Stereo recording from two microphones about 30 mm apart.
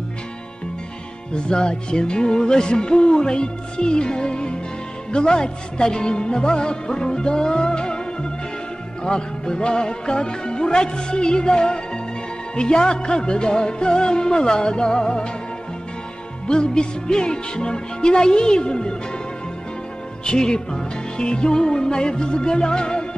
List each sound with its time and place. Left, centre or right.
1.3 s music: left
16.4 s music: left
20.2 s music: left